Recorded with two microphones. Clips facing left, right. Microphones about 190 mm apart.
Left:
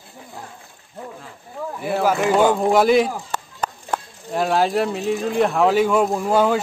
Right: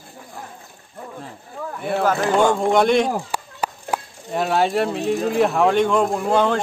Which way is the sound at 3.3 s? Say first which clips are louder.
Right 1 dB; 10° right (ahead or behind).